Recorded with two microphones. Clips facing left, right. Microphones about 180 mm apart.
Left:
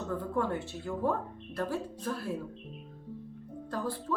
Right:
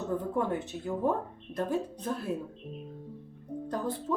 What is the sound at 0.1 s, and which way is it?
Speech, 20° right (ahead or behind).